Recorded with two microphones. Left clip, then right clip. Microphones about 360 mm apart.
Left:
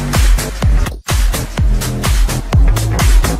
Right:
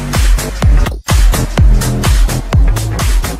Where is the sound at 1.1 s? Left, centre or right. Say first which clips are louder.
Right 3 dB; right.